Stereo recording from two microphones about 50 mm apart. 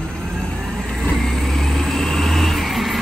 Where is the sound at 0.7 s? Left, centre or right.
Centre.